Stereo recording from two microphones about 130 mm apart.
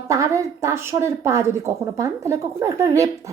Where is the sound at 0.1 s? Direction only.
25° right (ahead or behind).